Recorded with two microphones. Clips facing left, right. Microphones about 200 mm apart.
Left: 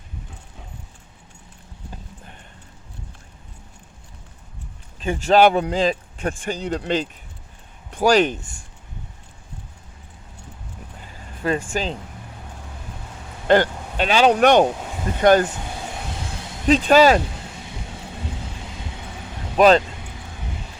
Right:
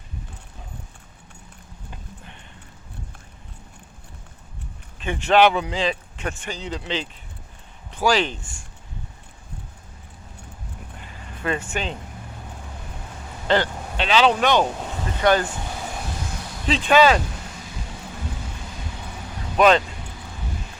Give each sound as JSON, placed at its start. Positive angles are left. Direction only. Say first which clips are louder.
{"t": 5.0, "sound": "speech", "louder": "left 2 dB", "side_deg": 40}
{"t": 11.4, "sound": "speech", "louder": "left 3 dB", "side_deg": 35}
{"t": 13.5, "sound": "speech", "louder": "left 5 dB", "side_deg": 45}
{"t": 16.6, "sound": "speech", "louder": "left 3 dB", "side_deg": 45}